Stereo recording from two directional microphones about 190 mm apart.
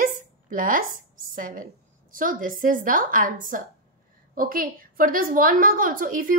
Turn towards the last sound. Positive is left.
turn(degrees=-45)  # may be behind; listen again after turning